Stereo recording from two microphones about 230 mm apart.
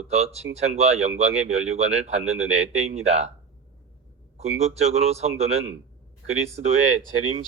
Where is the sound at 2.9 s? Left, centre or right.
Right.